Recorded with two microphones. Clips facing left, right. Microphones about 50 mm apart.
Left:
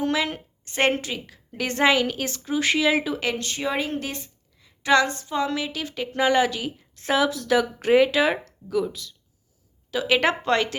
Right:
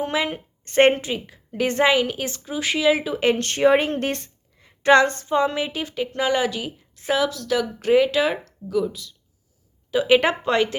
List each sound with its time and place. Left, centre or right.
0.0 s a woman's voice: right
2.4 s speech: centre
3.2 s speech: right
3.4 s a woman's voice: right
5.3 s a woman's voice: right
5.8 s speech: centre
7.3 s speech: centre
9.9 s speech: centre